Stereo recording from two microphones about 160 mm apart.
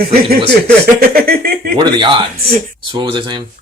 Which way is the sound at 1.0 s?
70° right (ahead or behind).